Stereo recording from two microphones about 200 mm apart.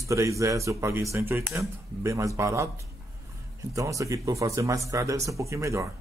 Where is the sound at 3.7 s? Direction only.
15° right (ahead or behind).